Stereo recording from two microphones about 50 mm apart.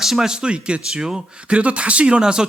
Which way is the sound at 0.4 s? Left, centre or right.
Right.